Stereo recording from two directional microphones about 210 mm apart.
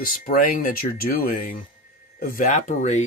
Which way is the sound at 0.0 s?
40° left (ahead or behind).